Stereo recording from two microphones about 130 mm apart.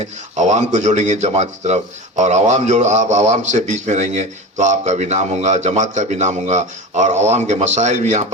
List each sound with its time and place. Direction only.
0.3 s speech: 65° right (ahead or behind)